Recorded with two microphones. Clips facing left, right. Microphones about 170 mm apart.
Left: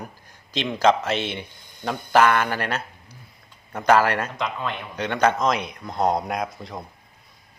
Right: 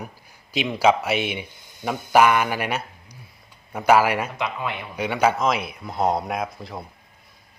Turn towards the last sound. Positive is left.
turn(degrees=0)  # may be behind; listen again after turning